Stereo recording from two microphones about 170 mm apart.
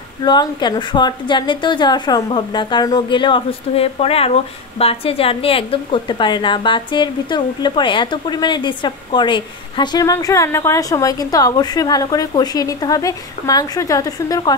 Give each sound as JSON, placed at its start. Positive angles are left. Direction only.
{"t": 0.2, "sound": "a woman's voice", "side_deg": 25}